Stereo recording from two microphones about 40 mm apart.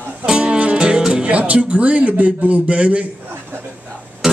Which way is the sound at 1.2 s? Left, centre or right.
Right.